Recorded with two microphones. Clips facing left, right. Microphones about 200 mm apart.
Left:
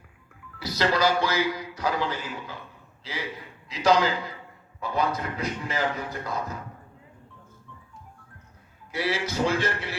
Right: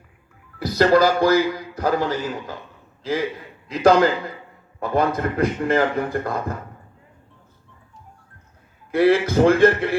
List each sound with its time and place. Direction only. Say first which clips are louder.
0.6 s a man's voice: right 8 dB; 50° right (ahead or behind)
8.9 s a man's voice: right 12 dB; 55° right (ahead or behind)